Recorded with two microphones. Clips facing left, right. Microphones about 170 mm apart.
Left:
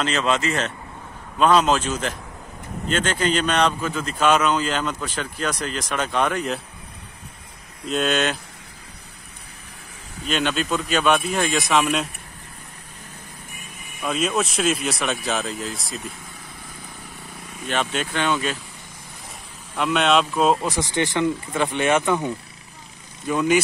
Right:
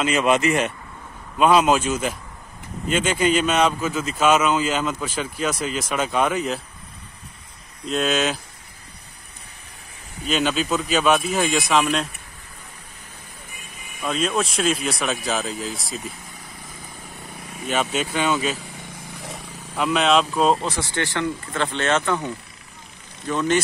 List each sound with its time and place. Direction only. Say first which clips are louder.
0.0 s a man's voice: right 3 dB; 15° right (ahead or behind)
7.8 s speech: even; centre (ahead or behind)
10.2 s speech: right 1 dB; centre (ahead or behind)
14.0 s speech: even; 5° left (ahead or behind)
17.6 s speech: right 2 dB; 5° right (ahead or behind)
19.7 s speech: even; centre (ahead or behind)
20.7 s speech: left 3 dB; 15° left (ahead or behind)